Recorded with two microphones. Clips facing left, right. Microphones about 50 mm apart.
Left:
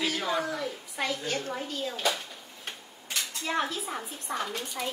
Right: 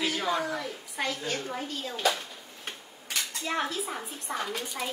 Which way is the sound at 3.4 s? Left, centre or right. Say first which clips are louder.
Left 1 dB; centre.